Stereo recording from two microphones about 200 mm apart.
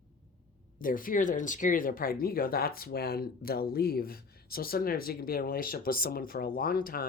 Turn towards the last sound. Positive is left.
turn(degrees=45)  # may be behind; listen again after turning